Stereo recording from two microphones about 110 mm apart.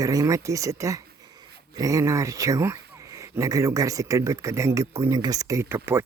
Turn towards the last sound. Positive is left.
turn(degrees=-20)  # may be behind; listen again after turning